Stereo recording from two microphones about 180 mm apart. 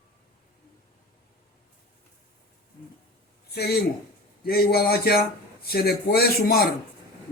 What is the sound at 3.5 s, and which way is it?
Speech, 60° left (ahead or behind).